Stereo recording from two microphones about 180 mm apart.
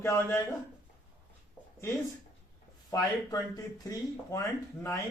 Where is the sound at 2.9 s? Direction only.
20° left (ahead or behind).